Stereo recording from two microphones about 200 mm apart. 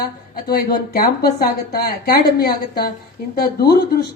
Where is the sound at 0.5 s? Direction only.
50° left (ahead or behind).